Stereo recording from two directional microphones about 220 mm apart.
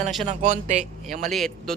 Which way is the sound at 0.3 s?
30° right (ahead or behind).